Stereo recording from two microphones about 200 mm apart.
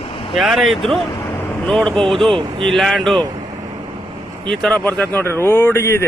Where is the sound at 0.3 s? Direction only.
Centre (ahead or behind).